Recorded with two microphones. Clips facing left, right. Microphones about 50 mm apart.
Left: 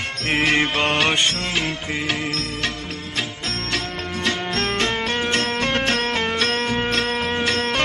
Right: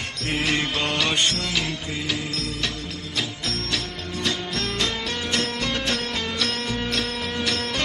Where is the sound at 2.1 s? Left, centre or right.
Left.